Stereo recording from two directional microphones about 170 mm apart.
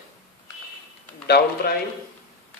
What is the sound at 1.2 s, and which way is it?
Speech, 70° left (ahead or behind).